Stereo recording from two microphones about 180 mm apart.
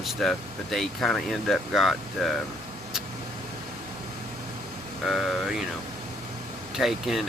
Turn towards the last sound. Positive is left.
turn(degrees=0)  # may be behind; listen again after turning